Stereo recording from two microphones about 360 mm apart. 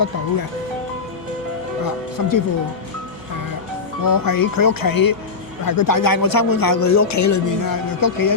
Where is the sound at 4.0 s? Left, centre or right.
Left.